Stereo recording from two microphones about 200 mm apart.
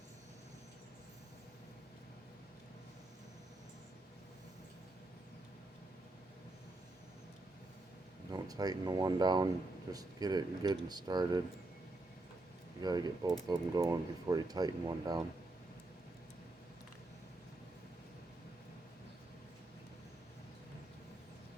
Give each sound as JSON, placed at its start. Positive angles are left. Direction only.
{"t": 8.3, "sound": "speech", "side_deg": -20}
{"t": 12.8, "sound": "speech", "side_deg": -20}